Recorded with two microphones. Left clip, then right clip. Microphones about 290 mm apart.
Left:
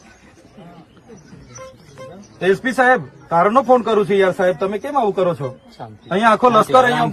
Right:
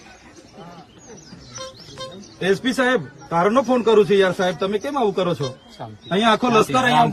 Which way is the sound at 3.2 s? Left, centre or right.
Centre.